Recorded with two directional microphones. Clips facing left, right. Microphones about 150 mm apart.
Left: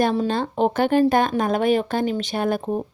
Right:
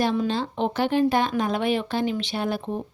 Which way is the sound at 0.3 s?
45° left (ahead or behind).